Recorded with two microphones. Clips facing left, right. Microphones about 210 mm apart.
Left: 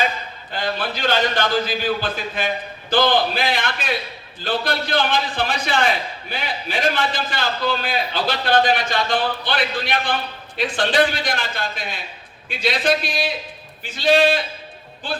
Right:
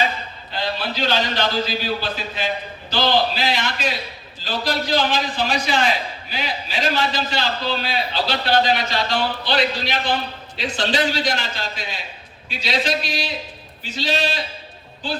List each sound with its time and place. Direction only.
0.5 s a man's voice: 50° left (ahead or behind)